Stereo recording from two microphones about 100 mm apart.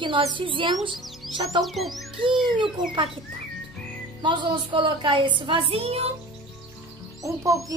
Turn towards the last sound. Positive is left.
turn(degrees=-30)  # may be behind; listen again after turning